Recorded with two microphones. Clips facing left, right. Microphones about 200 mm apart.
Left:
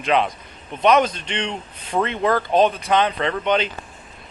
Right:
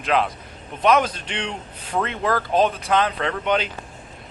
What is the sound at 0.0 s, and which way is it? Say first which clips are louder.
A man's voice: left 2 dB; centre (ahead or behind).